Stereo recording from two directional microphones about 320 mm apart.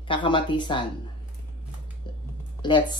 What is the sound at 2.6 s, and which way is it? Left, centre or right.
Speech, centre.